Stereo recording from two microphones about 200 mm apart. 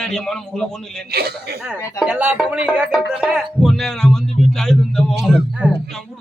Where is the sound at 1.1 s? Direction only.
50° right (ahead or behind).